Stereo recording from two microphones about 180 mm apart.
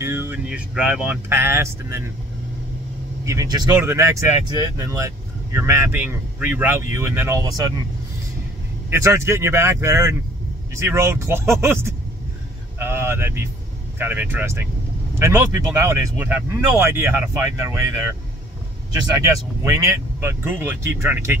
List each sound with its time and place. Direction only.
0.0 s speech: 15° right (ahead or behind)
3.3 s speech: 20° right (ahead or behind)
8.9 s speech: 15° right (ahead or behind)